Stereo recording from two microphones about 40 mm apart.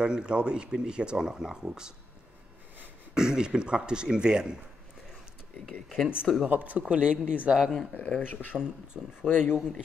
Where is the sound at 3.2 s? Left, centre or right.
Centre.